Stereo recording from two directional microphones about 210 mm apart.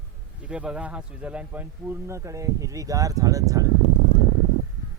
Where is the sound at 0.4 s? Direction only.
5° right (ahead or behind).